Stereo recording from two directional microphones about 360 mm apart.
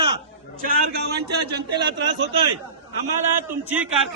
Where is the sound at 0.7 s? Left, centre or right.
Right.